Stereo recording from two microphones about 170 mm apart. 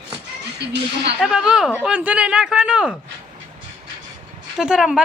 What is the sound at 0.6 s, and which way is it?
Speech, 85° right.